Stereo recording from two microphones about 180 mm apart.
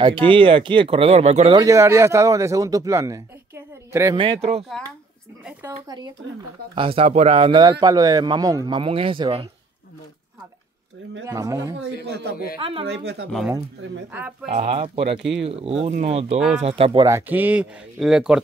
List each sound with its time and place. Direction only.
0.0 s speech: 30° right (ahead or behind)
1.6 s speech: 15° right (ahead or behind)
4.2 s a man's voice: 35° right (ahead or behind)
5.4 s a man's voice: 15° right (ahead or behind)
11.2 s speech: 15° right (ahead or behind)
12.1 s speech: 65° right (ahead or behind)
12.5 s speech: 30° right (ahead or behind)
12.8 s speech: 70° right (ahead or behind)
13.8 s speech: 90° right
14.1 s speech: 10° right (ahead or behind)
14.5 s a man's voice: 35° right (ahead or behind)
17.0 s speech: 15° right (ahead or behind)